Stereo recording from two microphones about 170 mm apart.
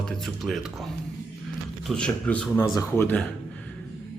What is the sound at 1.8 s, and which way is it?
Speech, 5° left (ahead or behind).